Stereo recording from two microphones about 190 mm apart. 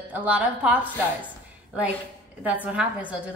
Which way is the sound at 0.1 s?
10° right (ahead or behind).